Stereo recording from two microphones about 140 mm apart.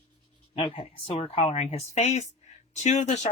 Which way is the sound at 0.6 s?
35° left (ahead or behind).